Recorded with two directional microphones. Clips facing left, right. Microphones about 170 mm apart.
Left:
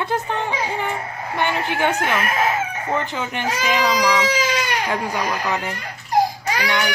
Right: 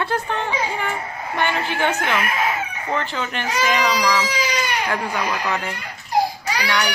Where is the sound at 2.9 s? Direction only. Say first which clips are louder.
Even; 15° left (ahead or behind).